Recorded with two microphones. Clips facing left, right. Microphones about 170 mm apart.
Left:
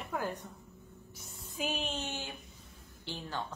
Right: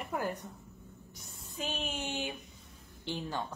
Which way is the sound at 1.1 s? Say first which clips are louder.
Left 2 dB; centre (ahead or behind).